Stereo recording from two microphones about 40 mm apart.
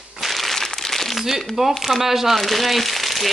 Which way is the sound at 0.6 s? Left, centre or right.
Centre.